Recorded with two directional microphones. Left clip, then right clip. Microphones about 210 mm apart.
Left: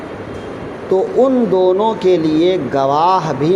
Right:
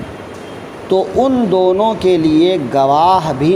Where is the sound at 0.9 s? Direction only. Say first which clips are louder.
Even; 50° right (ahead or behind).